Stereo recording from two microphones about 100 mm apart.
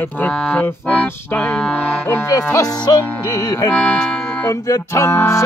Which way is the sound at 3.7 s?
10° left (ahead or behind).